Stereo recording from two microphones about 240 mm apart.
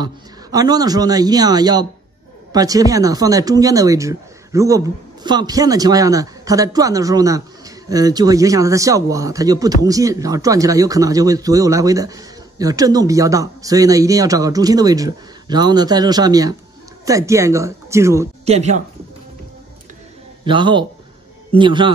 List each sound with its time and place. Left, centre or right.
0.0 s speech: centre
18.4 s speech: right
20.4 s a man's voice: centre